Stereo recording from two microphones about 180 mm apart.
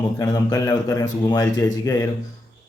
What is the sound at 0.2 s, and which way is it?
Speech, 20° left (ahead or behind).